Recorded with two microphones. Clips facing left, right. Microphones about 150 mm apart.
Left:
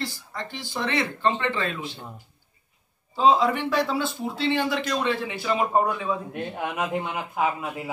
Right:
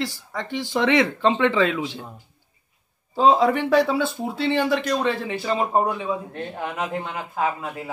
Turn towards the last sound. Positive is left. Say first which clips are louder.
# right 1 dB
turn(degrees=5)  # may be behind; listen again after turning